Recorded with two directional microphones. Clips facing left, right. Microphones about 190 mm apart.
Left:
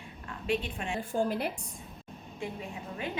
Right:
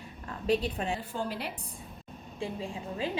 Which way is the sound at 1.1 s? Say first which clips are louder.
Left 5 dB; 50° left (ahead or behind).